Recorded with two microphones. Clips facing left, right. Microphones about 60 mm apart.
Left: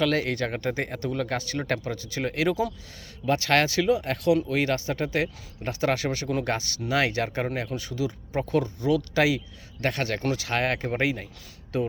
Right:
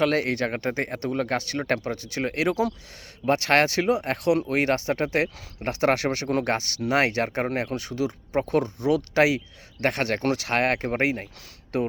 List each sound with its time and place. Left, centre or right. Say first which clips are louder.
0.0 s speech: right 2 dB; right
3.2 s speech: right 2 dB; right